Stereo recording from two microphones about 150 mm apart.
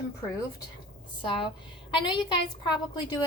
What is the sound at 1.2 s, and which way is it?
A woman's voice, 35° left (ahead or behind).